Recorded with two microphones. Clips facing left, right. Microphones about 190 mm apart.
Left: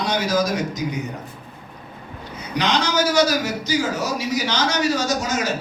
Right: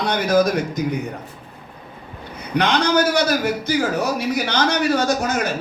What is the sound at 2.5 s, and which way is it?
A man's voice, 55° right (ahead or behind).